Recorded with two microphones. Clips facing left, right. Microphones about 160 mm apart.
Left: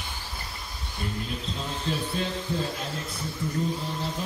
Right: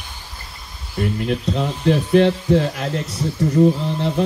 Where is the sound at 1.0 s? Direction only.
75° right (ahead or behind).